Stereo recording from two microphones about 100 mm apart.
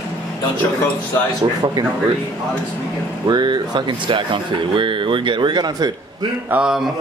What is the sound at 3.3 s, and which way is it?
Speech, 45° right (ahead or behind).